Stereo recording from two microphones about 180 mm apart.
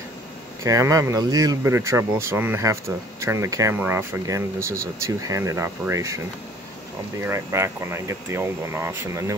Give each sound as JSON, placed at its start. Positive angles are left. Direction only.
{"t": 0.7, "sound": "speech", "side_deg": -20}